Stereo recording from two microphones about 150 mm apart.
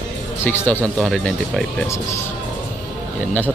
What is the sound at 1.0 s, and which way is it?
Speech, centre (ahead or behind).